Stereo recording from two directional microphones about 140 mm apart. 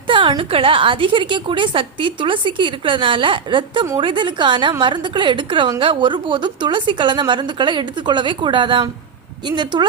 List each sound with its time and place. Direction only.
0.1 s a woman's voice: 35° right (ahead or behind)